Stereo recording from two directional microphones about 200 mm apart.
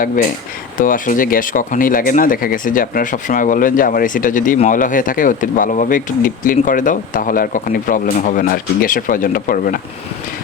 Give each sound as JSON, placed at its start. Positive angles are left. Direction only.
{"t": 0.8, "sound": "speech", "side_deg": 40}